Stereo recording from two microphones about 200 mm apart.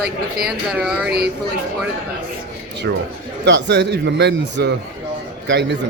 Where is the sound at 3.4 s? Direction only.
60° right (ahead or behind).